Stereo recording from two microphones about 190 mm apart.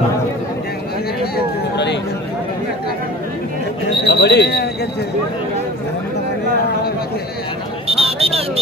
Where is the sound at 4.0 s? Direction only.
60° left (ahead or behind).